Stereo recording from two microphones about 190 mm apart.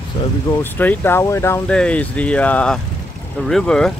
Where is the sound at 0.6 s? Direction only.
10° left (ahead or behind).